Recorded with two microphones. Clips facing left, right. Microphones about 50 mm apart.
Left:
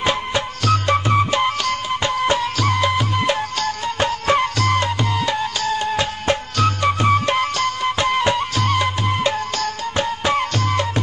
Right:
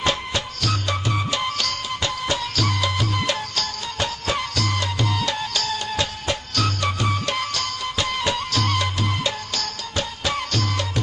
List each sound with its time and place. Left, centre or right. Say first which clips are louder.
0.0 s music: left 3 dB; centre
0.7 s music: left 9 dB; left
5.1 s music: left 4 dB; centre